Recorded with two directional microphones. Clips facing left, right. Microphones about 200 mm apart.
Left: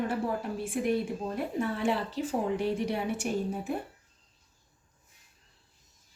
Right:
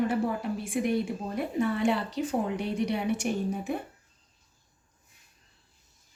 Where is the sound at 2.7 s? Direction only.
70° right (ahead or behind).